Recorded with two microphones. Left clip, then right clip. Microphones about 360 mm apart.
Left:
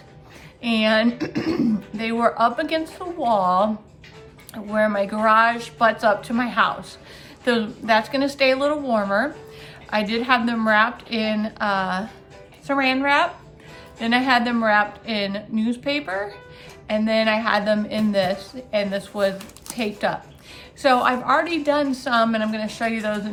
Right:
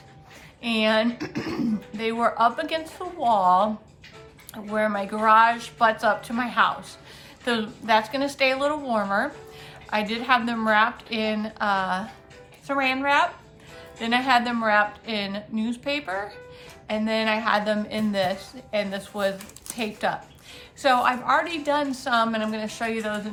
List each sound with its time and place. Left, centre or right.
0.6 s a woman's voice: centre